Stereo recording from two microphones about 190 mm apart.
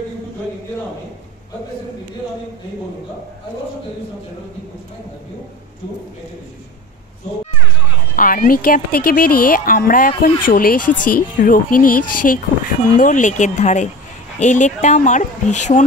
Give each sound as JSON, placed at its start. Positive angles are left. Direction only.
{"t": 8.2, "sound": "a woman's voice", "side_deg": 50}